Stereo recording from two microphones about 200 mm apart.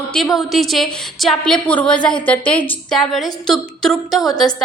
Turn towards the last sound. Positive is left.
turn(degrees=0)  # may be behind; listen again after turning